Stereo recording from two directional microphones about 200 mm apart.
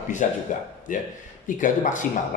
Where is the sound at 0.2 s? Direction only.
40° left (ahead or behind).